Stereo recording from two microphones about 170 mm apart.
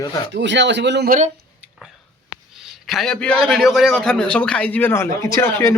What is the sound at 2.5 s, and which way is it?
A man's voice, centre (ahead or behind).